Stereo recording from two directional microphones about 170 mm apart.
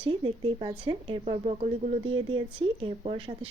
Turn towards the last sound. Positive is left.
turn(degrees=-35)  # may be behind; listen again after turning